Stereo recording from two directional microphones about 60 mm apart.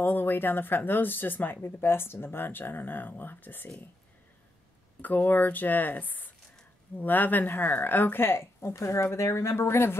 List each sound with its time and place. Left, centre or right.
0.0 s speech: left
5.0 s a woman's voice: left